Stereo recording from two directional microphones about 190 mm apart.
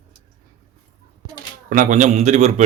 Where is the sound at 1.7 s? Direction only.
45° right (ahead or behind).